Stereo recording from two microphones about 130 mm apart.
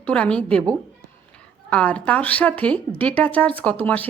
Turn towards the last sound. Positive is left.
turn(degrees=10)  # may be behind; listen again after turning